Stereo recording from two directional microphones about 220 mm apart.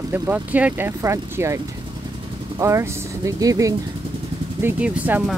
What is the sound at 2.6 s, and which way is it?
Speech, 15° right (ahead or behind).